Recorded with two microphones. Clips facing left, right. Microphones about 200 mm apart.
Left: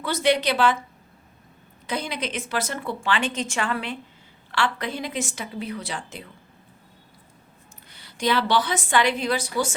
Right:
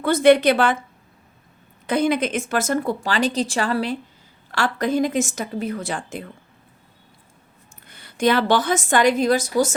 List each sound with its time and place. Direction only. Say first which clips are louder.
0.0 s a woman's voice: right 8 dB; 55° right (ahead or behind)
1.9 s a woman's voice: right 9 dB; 50° right (ahead or behind)
7.9 s a woman's voice: right 5 dB; 50° right (ahead or behind)